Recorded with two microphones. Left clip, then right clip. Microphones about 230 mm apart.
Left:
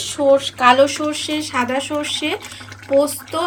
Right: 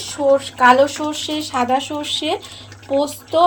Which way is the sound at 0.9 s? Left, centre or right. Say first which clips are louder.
Left 1 dB; left.